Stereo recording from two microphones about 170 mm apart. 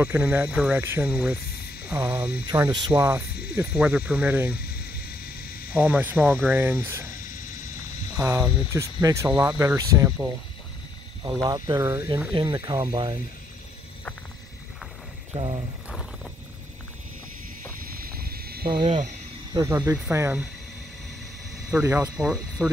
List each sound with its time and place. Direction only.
0.0 s speech: 10° right (ahead or behind)
2.5 s speech: 20° right (ahead or behind)
4.6 s cricket: 65° left (ahead or behind)
5.7 s speech: 10° right (ahead or behind)
8.2 s speech: 15° right (ahead or behind)
11.4 s speech: 20° right (ahead or behind)
12.3 s speech: 30° right (ahead or behind)
15.3 s speech: 30° right (ahead or behind)
17.9 s cricket: 60° right (ahead or behind)
19.5 s speech: 15° right (ahead or behind)
21.8 s speech: 15° right (ahead or behind)
22.1 s speech: 5° right (ahead or behind)